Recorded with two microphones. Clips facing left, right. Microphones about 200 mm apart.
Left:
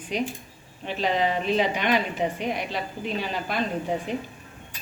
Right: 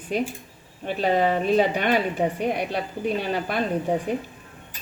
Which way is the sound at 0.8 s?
50° right (ahead or behind).